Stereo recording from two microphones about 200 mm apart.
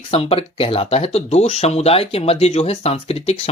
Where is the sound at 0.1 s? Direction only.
30° left (ahead or behind).